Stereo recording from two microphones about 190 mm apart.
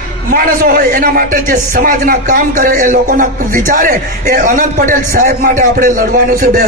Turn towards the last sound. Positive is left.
turn(degrees=-50)  # may be behind; listen again after turning